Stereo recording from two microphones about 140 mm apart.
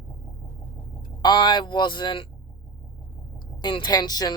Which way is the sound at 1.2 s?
30° left (ahead or behind).